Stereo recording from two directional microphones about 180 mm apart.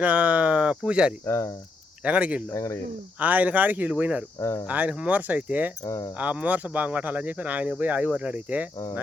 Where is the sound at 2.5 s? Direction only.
15° left (ahead or behind).